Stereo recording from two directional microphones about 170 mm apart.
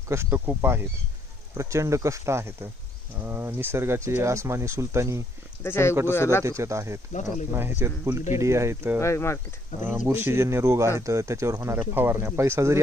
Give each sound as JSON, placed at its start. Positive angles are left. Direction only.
{"t": 0.1, "sound": "speech", "side_deg": -15}
{"t": 5.6, "sound": "speech", "side_deg": 15}
{"t": 6.4, "sound": "speech", "side_deg": -15}
{"t": 7.1, "sound": "speech", "side_deg": 45}
{"t": 7.5, "sound": "speech", "side_deg": -15}
{"t": 9.0, "sound": "speech", "side_deg": 15}
{"t": 10.0, "sound": "speech", "side_deg": -15}